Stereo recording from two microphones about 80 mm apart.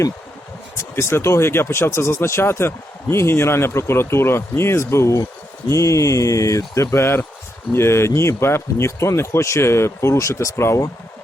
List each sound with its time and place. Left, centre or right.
0.8 s speech: left